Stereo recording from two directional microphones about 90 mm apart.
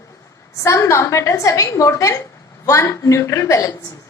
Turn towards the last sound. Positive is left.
turn(degrees=35)  # may be behind; listen again after turning